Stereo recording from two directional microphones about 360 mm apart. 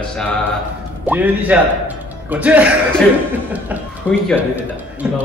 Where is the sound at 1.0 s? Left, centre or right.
Centre.